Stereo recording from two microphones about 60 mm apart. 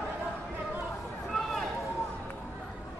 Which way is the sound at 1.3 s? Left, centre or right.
Centre.